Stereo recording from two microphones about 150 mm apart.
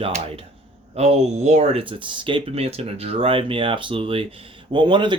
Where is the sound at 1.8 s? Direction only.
35° right (ahead or behind).